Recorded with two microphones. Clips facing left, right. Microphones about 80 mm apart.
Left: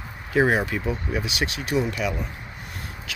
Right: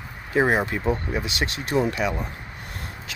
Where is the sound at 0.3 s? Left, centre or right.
Centre.